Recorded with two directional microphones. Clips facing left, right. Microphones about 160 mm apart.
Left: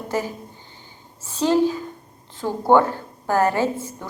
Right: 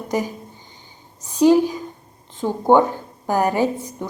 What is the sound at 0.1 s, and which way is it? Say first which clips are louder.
A woman's voice: right 2 dB; 15° right (ahead or behind).